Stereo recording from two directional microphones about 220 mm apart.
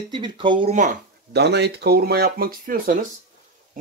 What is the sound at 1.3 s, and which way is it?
Speech, 50° right (ahead or behind).